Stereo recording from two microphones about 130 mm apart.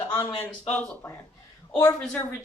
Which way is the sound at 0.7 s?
10° left (ahead or behind).